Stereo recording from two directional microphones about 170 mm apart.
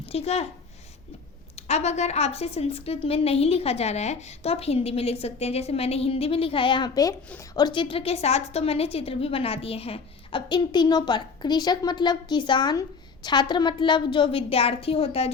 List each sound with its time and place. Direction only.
0.0 s a woman's voice: 35° left (ahead or behind)
1.5 s a woman's voice: 40° left (ahead or behind)